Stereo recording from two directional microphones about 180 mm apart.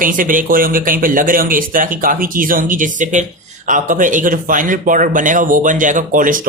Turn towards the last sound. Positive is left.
turn(degrees=-50)  # may be behind; listen again after turning